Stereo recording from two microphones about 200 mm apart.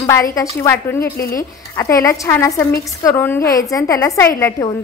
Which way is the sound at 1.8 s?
15° left (ahead or behind).